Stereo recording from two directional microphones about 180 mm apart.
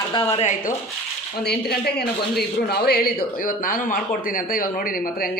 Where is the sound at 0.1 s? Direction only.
25° left (ahead or behind).